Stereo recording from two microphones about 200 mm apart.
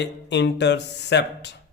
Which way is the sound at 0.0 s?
60° left (ahead or behind).